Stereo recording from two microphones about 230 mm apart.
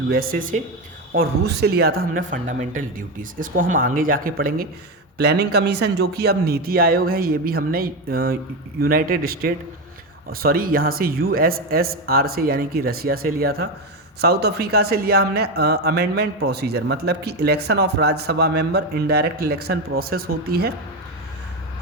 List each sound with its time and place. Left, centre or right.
0.1 s speech: right